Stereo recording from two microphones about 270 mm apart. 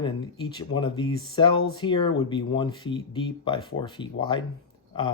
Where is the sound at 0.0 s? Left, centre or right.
Centre.